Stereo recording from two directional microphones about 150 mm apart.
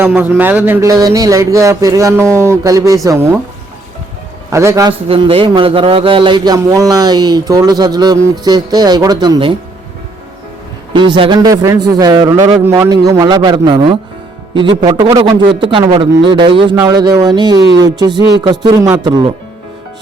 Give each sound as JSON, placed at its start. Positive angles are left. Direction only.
{"t": 0.2, "sound": "a man's voice", "side_deg": -10}
{"t": 4.5, "sound": "a man's voice", "side_deg": -20}
{"t": 4.9, "sound": "a man's voice", "side_deg": -35}
{"t": 10.9, "sound": "a man's voice", "side_deg": -30}